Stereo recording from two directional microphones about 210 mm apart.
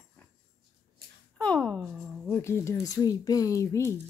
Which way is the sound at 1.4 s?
5° left (ahead or behind).